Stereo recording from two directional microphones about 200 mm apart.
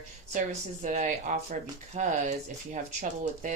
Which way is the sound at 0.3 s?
40° right (ahead or behind).